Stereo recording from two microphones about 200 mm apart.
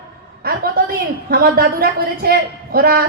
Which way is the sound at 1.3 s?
50° right (ahead or behind).